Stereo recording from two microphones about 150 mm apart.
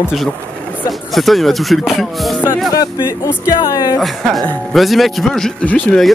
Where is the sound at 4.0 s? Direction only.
Centre (ahead or behind).